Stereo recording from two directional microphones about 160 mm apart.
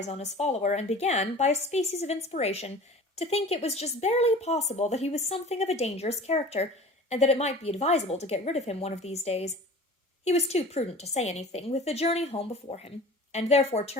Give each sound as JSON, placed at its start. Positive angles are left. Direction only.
{"t": 0.1, "sound": "a woman's voice", "side_deg": 45}